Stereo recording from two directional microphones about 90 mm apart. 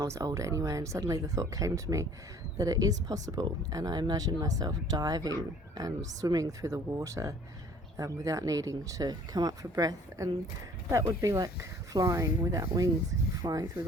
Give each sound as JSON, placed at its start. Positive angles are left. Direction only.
{"t": 0.0, "sound": "speech", "side_deg": -40}